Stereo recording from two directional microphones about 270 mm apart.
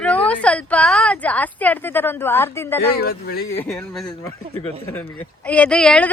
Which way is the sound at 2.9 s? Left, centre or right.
Left.